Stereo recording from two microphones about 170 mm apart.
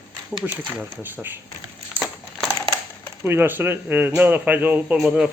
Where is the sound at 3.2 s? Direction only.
15° right (ahead or behind).